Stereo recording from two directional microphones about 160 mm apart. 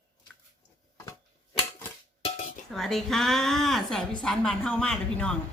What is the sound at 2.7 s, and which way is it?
A woman's voice, centre (ahead or behind).